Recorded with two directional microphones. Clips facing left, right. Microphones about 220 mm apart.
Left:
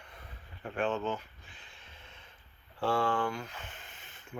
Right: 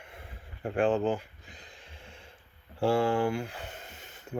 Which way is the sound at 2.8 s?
25° right (ahead or behind).